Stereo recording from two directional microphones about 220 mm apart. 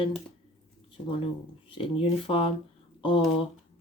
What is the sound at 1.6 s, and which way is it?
Speech, 25° left (ahead or behind).